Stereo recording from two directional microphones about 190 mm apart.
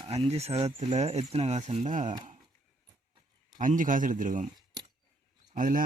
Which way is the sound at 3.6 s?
45° right (ahead or behind).